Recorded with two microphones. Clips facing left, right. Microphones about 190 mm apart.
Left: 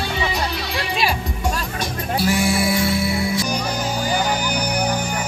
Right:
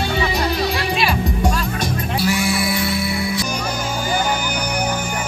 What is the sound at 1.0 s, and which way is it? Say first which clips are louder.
Music: right 2 dB; 40° left (ahead or behind).